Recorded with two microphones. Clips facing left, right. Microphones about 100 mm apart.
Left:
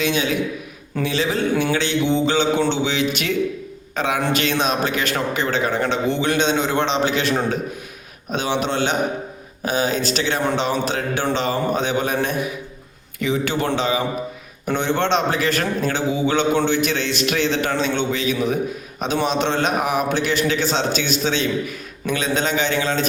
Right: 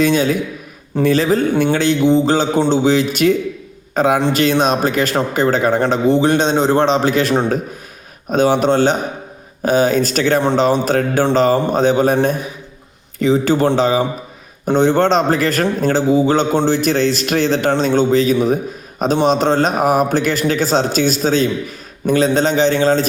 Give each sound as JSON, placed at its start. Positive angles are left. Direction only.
{"t": 0.0, "sound": "a man's voice", "side_deg": -45}